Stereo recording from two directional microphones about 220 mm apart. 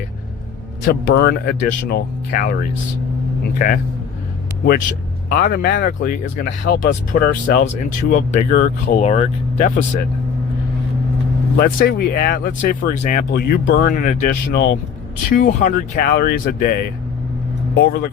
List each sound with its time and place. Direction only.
0.9 s speech: 45° left (ahead or behind)
4.6 s speech: 40° left (ahead or behind)
11.5 s speech: 45° left (ahead or behind)
17.7 s speech: 45° left (ahead or behind)